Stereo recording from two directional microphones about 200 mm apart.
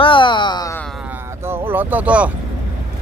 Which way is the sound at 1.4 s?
10° right (ahead or behind).